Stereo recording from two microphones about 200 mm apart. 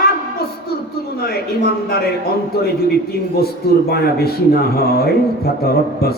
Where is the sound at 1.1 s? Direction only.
55° left (ahead or behind).